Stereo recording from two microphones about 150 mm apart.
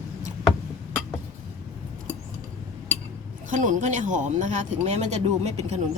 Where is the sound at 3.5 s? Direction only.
60° right (ahead or behind).